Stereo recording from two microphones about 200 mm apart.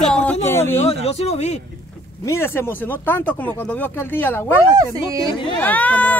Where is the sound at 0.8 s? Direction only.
30° left (ahead or behind).